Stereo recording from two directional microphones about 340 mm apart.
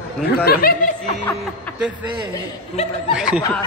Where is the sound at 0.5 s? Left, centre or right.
Left.